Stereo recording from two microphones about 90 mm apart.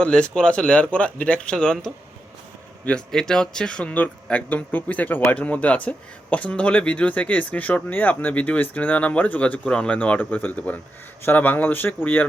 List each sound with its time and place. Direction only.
0.0 s speech: 10° left (ahead or behind)